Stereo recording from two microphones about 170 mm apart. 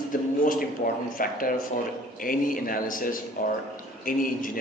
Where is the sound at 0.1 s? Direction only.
50° left (ahead or behind).